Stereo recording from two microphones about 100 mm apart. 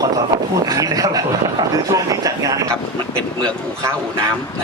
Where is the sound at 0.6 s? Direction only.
40° right (ahead or behind).